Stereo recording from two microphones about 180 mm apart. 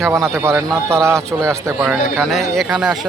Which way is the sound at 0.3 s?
15° right (ahead or behind).